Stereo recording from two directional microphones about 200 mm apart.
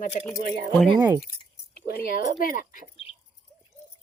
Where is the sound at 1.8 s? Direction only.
50° left (ahead or behind).